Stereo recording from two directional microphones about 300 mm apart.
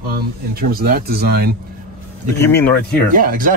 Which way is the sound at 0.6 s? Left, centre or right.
Right.